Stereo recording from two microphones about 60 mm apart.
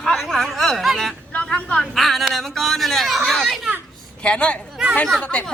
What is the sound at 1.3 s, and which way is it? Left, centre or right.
Speech, centre.